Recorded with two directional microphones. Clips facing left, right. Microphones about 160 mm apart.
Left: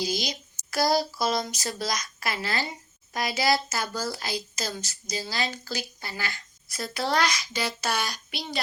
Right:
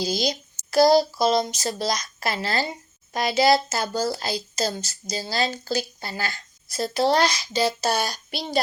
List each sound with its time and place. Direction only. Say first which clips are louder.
0.0 s speech: right 5 dB; 30° right (ahead or behind)